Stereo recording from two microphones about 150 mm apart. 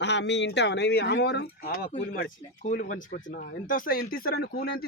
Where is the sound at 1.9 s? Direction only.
60° left (ahead or behind); by 4.4 s 75° left (ahead or behind).